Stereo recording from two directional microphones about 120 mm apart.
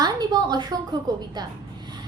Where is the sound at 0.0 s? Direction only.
35° right (ahead or behind).